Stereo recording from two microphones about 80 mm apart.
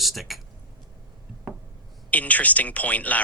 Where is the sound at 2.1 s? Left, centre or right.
Centre.